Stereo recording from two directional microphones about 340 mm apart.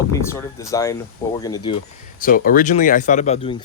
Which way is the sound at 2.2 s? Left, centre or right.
Left.